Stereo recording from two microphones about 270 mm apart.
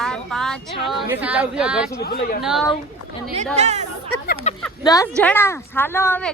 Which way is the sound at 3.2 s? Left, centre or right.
Right.